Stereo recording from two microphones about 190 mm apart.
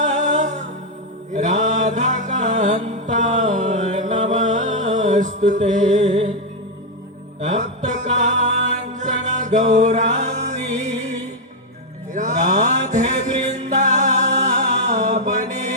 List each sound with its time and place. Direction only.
0.0 s music: 40° right (ahead or behind)
8.1 s music: 40° right (ahead or behind)
12.1 s music: 40° right (ahead or behind)